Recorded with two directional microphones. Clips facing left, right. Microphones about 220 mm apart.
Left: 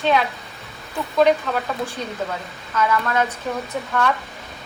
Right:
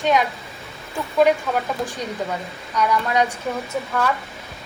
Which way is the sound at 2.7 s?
15° right (ahead or behind).